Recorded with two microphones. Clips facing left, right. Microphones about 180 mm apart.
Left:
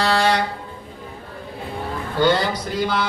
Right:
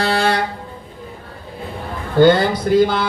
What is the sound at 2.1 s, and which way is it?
Mantra, 50° right (ahead or behind).